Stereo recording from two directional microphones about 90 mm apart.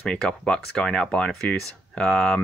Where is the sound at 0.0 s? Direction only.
10° left (ahead or behind).